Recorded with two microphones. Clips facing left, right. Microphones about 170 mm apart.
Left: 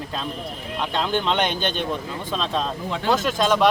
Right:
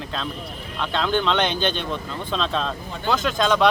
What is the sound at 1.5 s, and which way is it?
Speech, 50° left (ahead or behind).